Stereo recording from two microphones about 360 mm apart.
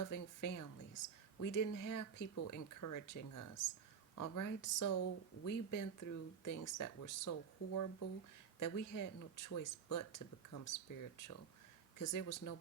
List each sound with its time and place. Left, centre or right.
0.0 s speech: left